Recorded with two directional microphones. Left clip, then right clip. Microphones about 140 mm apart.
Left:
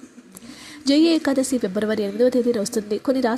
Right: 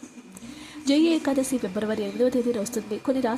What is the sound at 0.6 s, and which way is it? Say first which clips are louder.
A woman's voice: left 4 dB; 20° left (ahead or behind).